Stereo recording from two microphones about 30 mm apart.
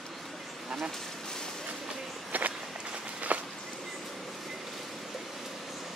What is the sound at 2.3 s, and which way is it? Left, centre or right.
Run, right.